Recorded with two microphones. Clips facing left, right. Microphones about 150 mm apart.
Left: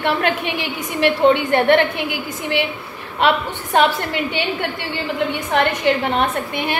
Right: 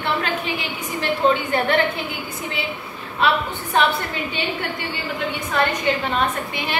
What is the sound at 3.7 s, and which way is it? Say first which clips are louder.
Speech: left 4 dB; 75° left (ahead or behind).